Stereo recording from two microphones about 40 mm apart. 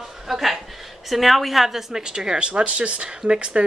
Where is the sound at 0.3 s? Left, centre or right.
Centre.